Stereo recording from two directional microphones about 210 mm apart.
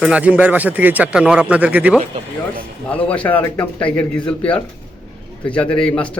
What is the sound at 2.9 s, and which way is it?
A man's voice, 5° left (ahead or behind).